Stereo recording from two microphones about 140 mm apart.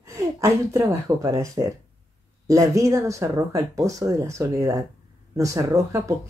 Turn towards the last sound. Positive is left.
turn(degrees=-20)  # may be behind; listen again after turning